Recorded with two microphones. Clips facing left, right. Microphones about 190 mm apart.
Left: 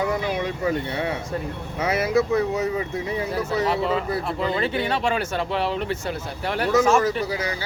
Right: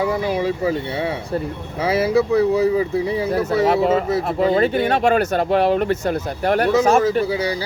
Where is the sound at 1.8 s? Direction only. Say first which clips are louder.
Right 4 dB; 30° right (ahead or behind).